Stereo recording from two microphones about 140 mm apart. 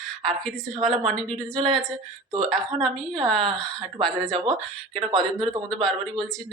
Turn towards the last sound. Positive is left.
turn(degrees=5)  # may be behind; listen again after turning